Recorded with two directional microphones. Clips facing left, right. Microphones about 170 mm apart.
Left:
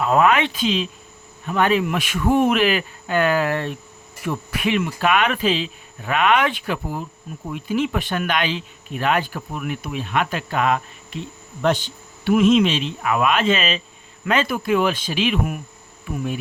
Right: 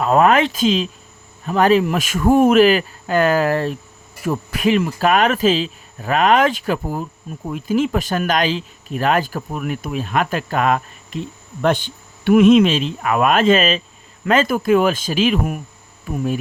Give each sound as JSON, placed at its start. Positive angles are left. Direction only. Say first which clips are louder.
{"t": 0.0, "sound": "speech", "louder": "right 3 dB", "side_deg": -40}